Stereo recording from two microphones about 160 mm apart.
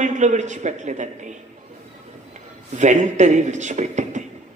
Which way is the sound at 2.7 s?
50° right (ahead or behind).